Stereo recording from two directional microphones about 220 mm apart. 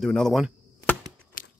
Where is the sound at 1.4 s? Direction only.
40° left (ahead or behind).